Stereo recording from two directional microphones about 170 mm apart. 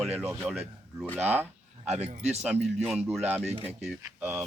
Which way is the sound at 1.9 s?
40° right (ahead or behind).